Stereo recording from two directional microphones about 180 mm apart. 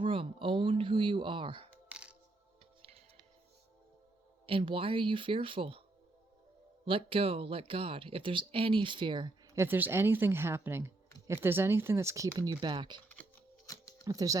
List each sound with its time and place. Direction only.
0.0 s speech: 30° right (ahead or behind)
1.9 s music: 5° right (ahead or behind)
4.4 s speech: 30° right (ahead or behind)
6.8 s speech: 30° right (ahead or behind)
9.6 s speech: 10° right (ahead or behind)
14.0 s speech: 20° right (ahead or behind)